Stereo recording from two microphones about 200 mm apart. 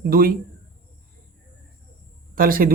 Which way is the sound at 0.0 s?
45° right (ahead or behind).